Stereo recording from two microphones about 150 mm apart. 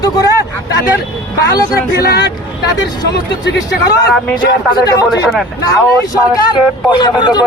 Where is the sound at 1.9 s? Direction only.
90° left.